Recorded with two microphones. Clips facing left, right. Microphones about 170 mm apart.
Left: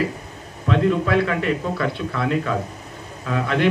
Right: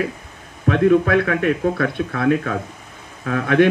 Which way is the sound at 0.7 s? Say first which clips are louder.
Right 4 dB; 55° right (ahead or behind).